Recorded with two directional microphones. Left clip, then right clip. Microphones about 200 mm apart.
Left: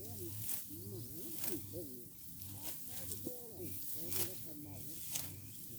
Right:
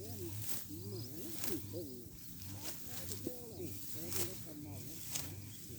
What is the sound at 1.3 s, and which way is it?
Snake, 20° left (ahead or behind).